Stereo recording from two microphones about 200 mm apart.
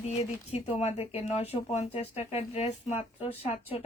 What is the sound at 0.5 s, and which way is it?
Speech, 30° left (ahead or behind).